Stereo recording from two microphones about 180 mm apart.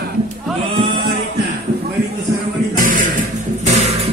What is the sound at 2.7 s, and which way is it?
Music, 50° right (ahead or behind).